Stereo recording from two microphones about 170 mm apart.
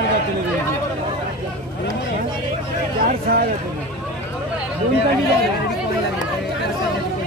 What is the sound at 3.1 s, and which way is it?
Speech, 60° right (ahead or behind).